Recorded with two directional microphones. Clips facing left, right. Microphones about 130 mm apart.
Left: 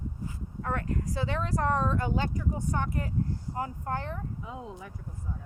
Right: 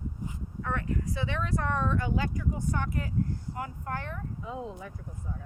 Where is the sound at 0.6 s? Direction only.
40° left (ahead or behind).